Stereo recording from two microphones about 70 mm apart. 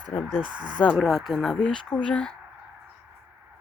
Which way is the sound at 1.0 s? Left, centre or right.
Centre.